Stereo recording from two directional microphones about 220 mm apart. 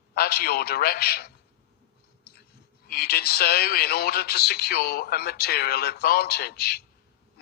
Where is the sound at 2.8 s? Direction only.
45° left (ahead or behind).